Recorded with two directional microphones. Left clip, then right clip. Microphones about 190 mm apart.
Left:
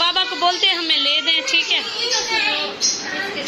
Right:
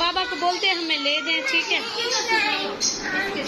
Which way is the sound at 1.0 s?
50° left (ahead or behind).